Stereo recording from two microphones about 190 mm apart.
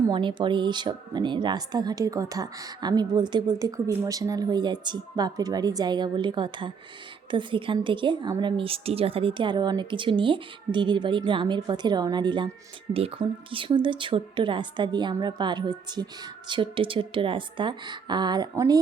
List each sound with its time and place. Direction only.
0.1 s speech: 25° right (ahead or behind)